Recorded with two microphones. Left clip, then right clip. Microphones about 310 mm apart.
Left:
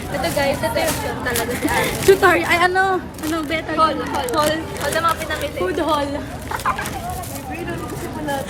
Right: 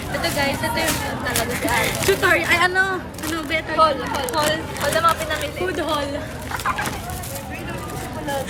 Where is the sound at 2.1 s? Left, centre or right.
Centre.